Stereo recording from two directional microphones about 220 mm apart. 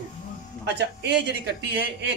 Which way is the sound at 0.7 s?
50° right (ahead or behind).